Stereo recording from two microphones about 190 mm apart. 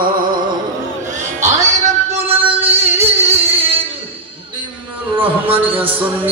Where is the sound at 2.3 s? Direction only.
10° right (ahead or behind).